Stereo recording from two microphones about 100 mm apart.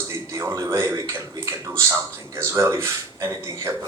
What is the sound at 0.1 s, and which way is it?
A man's voice, 30° right (ahead or behind).